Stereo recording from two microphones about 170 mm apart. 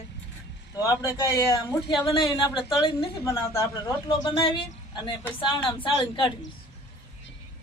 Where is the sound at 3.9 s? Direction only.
25° left (ahead or behind).